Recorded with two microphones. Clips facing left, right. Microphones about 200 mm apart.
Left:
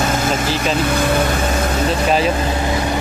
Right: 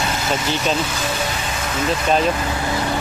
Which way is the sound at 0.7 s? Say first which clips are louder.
Left 7 dB; 60° left (ahead or behind).